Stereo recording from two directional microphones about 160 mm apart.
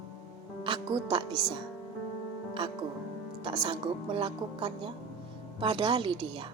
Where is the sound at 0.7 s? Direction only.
30° right (ahead or behind).